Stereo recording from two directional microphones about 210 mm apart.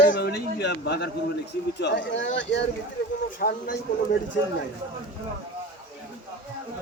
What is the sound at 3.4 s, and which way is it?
Speech, 45° left (ahead or behind).